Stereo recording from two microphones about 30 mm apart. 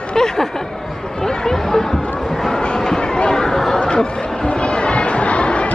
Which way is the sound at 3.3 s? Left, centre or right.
Centre.